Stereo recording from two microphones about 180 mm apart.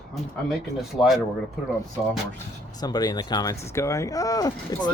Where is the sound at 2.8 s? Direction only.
20° left (ahead or behind).